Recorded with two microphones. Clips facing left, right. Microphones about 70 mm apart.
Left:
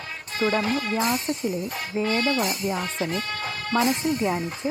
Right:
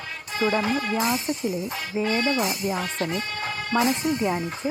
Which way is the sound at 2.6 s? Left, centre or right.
Centre.